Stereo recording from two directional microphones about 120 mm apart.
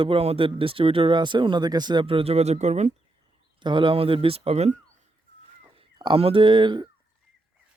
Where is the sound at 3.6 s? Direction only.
45° right (ahead or behind); by 4.7 s 60° right (ahead or behind).